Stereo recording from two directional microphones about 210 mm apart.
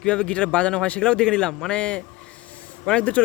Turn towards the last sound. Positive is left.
turn(degrees=5)  # may be behind; listen again after turning